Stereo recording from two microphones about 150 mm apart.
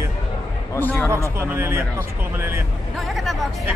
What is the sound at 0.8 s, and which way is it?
Speech, 10° left (ahead or behind).